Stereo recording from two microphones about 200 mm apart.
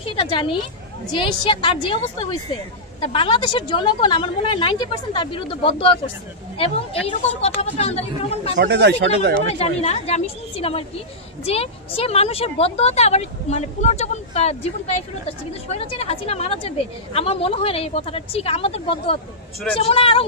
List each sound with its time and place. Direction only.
0.0 s speech: 25° left (ahead or behind)
8.5 s speech: 60° right (ahead or behind)
9.6 s speech: 30° left (ahead or behind)